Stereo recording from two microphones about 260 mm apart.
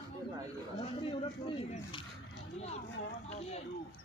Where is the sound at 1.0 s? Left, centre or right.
Centre.